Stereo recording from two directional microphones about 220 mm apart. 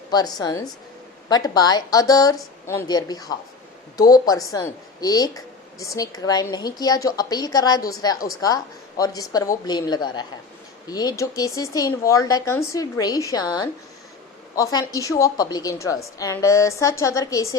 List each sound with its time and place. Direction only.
0.1 s a woman's voice: 20° left (ahead or behind)